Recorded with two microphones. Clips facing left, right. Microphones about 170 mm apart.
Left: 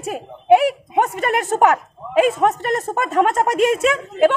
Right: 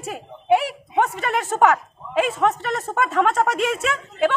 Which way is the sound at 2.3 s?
15° left (ahead or behind).